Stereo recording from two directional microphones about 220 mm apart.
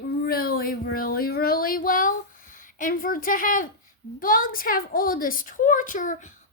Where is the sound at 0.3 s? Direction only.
40° left (ahead or behind).